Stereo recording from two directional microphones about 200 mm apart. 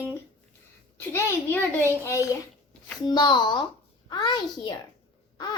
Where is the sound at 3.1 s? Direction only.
20° left (ahead or behind).